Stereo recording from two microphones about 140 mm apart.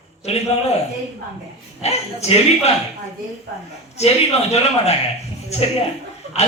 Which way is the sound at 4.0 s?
50° left (ahead or behind).